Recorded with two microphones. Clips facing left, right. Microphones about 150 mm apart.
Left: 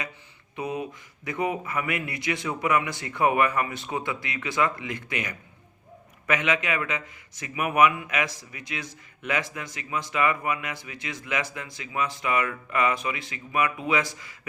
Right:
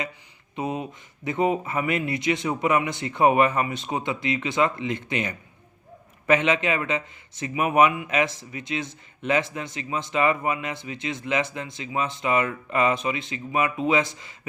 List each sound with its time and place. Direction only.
0.5 s speech: 25° right (ahead or behind)